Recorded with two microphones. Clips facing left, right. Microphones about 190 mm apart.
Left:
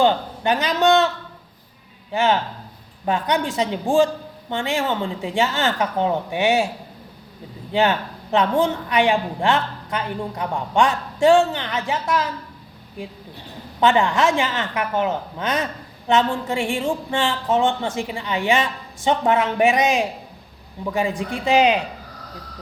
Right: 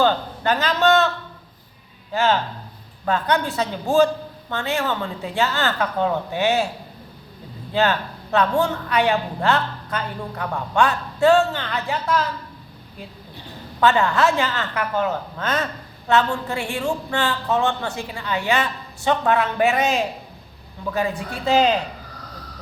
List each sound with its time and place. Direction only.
0.0 s a man's voice: 15° left (ahead or behind)
3.1 s speech: 15° left (ahead or behind)
7.7 s speech: 15° left (ahead or behind)
13.7 s speech: 15° left (ahead or behind)